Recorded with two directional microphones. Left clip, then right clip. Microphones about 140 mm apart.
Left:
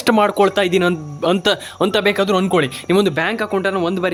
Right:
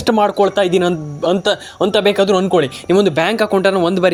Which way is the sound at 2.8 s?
5° right (ahead or behind).